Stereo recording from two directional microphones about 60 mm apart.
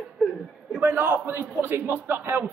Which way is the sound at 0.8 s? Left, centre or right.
Right.